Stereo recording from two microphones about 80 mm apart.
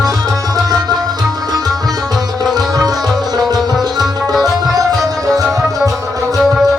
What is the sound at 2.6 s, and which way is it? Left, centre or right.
Sitar, right.